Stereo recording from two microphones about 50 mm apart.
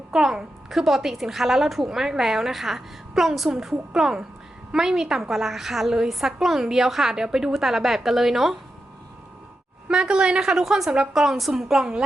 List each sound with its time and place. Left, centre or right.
0.1 s a woman's voice: centre
9.9 s a woman's voice: centre